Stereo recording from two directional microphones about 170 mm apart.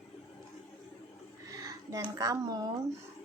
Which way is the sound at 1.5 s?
20° right (ahead or behind).